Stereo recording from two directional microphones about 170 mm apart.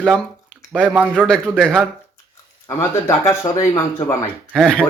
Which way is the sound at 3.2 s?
15° left (ahead or behind).